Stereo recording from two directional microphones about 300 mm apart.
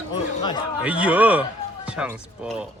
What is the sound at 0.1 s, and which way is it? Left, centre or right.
Chatter, centre.